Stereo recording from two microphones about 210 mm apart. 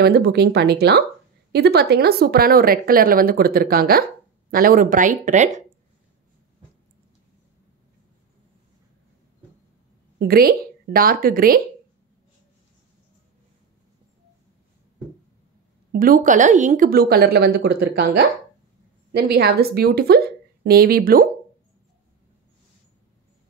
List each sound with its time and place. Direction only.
0.0 s speech: 50° right (ahead or behind)
10.1 s speech: 45° right (ahead or behind)
15.9 s speech: 45° right (ahead or behind)